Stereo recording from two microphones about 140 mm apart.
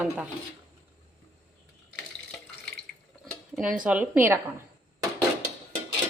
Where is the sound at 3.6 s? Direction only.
5° right (ahead or behind).